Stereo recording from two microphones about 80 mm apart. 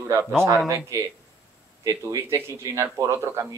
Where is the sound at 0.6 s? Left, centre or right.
Right.